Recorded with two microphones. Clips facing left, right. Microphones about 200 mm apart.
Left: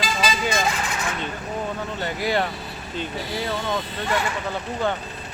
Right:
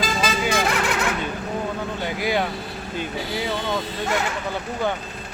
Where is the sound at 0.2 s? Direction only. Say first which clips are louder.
Even; 60° right (ahead or behind).